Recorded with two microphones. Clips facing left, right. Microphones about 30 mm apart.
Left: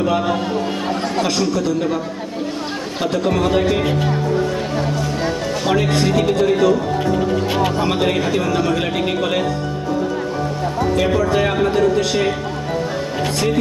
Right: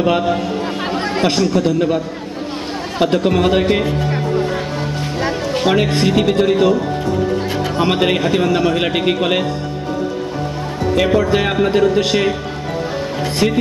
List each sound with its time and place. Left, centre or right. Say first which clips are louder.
0.8 s speech: right 5 dB; right
3.0 s speech: right 4 dB; right
5.2 s speech: right 7 dB; right
7.8 s speech: right 3 dB; right
11.0 s a man's voice: right 3 dB; right
13.4 s speech: right 4 dB; right